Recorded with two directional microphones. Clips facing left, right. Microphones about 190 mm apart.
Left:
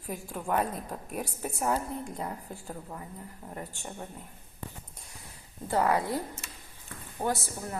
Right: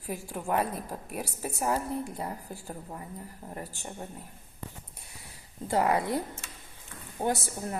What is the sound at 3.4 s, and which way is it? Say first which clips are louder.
Speech: even; 20° right (ahead or behind).